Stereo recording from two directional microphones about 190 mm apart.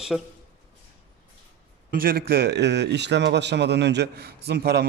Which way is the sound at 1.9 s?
50° right (ahead or behind).